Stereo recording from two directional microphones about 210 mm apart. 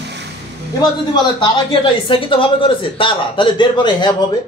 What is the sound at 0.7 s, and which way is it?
A man's voice, 20° left (ahead or behind).